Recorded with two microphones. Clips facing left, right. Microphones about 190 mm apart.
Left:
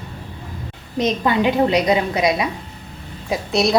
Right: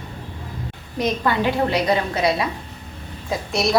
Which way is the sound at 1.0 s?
20° left (ahead or behind).